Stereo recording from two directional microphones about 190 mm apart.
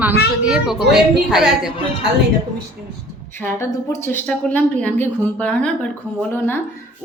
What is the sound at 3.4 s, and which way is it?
Speech, 10° left (ahead or behind).